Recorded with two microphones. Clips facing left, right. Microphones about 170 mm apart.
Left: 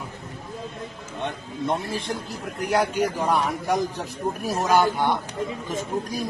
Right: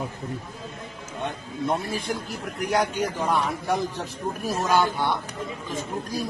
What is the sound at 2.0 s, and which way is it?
A man's voice, 5° left (ahead or behind).